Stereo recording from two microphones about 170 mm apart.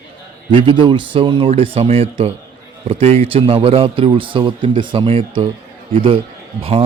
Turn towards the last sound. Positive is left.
turn(degrees=-35)  # may be behind; listen again after turning